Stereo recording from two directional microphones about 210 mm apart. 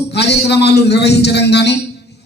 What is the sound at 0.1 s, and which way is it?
A man's voice, 55° left (ahead or behind).